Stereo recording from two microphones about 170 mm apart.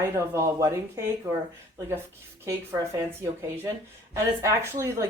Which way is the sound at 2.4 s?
15° right (ahead or behind).